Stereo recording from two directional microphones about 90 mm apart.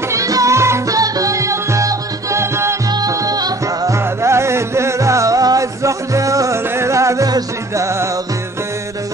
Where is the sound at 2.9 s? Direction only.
40° right (ahead or behind).